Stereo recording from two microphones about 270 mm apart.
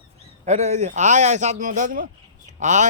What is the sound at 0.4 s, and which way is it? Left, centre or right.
Speech, right.